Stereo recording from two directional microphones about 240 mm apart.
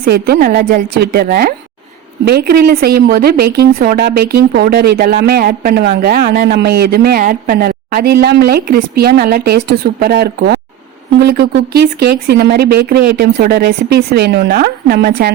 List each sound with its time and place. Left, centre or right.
0.0 s a woman's voice: right